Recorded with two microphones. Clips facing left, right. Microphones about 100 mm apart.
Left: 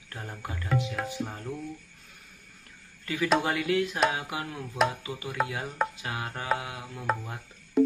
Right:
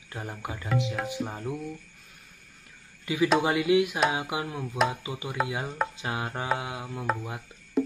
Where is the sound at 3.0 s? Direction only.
15° right (ahead or behind).